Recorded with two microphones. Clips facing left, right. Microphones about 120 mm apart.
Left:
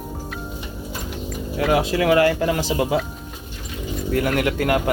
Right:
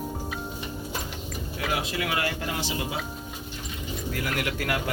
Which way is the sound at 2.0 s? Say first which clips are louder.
Left 13 dB; 90° left.